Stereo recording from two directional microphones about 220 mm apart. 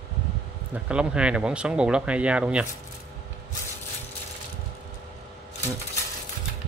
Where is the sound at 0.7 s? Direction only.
5° right (ahead or behind).